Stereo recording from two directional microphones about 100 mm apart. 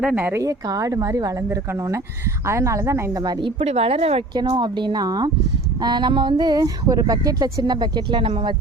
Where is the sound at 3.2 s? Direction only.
45° right (ahead or behind).